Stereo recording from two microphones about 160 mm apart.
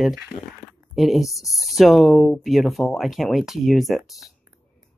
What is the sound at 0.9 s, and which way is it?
Speech, centre (ahead or behind).